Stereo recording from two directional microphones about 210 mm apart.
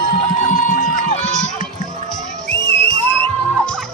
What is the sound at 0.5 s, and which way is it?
Music, 35° left (ahead or behind).